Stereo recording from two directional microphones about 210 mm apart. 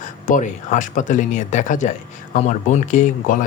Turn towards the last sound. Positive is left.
turn(degrees=35)  # may be behind; listen again after turning